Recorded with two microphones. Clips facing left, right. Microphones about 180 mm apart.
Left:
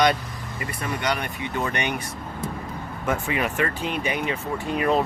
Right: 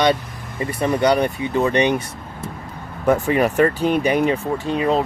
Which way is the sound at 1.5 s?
30° right (ahead or behind).